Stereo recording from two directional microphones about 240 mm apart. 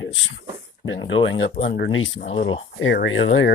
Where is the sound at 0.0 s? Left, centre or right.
Left.